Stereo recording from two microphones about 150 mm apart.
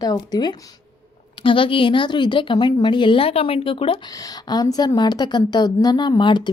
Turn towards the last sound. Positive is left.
turn(degrees=30)  # may be behind; listen again after turning